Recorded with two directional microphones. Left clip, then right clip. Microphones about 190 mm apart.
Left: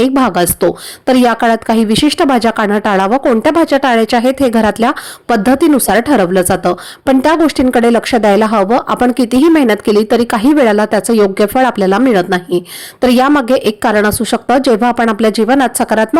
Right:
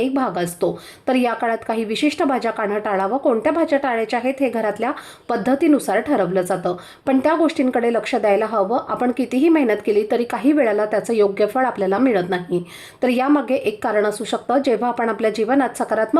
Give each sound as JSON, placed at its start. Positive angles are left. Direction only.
{"t": 0.1, "sound": "speech", "side_deg": 35}